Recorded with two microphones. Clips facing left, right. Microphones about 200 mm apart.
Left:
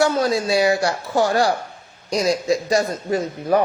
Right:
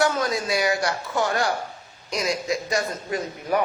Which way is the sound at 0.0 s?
30° left (ahead or behind).